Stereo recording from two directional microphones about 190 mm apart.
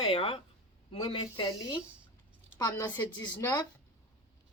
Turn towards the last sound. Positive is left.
turn(degrees=10)  # may be behind; listen again after turning